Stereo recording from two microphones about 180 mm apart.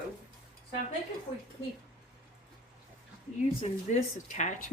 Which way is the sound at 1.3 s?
40° left (ahead or behind).